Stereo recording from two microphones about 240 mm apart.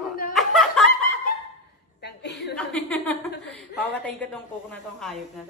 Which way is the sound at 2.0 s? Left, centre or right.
Left.